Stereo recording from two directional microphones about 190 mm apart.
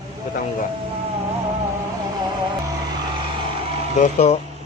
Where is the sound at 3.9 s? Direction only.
40° left (ahead or behind).